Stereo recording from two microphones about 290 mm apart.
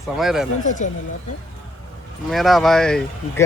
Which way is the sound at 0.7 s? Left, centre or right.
Left.